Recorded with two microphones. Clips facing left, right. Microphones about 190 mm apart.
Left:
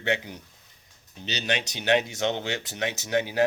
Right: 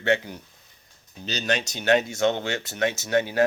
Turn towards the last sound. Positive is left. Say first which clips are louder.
# right 2 dB
turn(degrees=15)  # may be behind; listen again after turning